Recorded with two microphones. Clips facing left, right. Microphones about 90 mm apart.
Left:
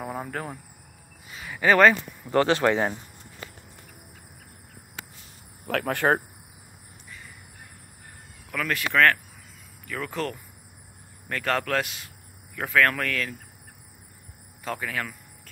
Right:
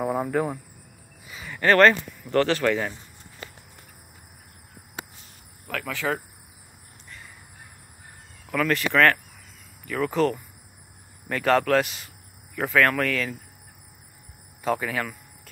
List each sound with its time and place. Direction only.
0.0 s cricket: 5° right (ahead or behind)
1.2 s speech: centre (ahead or behind); by 2.9 s 25° left (ahead or behind)
5.7 s speech: 60° left (ahead or behind)
8.5 s speech: centre (ahead or behind)
14.6 s speech: centre (ahead or behind)